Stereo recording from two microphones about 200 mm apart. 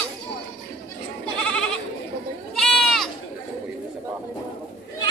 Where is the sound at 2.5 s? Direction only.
Centre (ahead or behind).